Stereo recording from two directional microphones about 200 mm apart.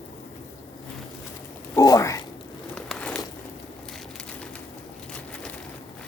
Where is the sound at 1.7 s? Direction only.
15° left (ahead or behind).